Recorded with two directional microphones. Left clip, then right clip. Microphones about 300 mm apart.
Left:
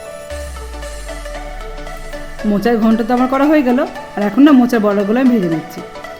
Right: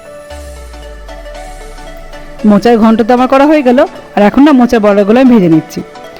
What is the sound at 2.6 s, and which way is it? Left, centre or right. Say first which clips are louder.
Speech: right 6 dB; right.